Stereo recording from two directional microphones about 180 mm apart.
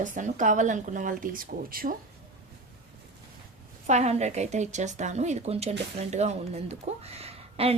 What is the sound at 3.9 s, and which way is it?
A woman's voice, 40° right (ahead or behind).